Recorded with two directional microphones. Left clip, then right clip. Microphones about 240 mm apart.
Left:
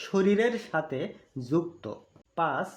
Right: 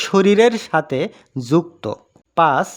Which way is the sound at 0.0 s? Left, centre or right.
Right.